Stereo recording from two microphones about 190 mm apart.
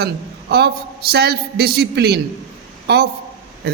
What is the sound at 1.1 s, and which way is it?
A man's voice, 55° right (ahead or behind).